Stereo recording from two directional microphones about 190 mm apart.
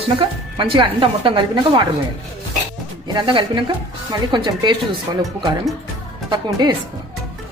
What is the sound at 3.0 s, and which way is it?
Speech, 25° right (ahead or behind).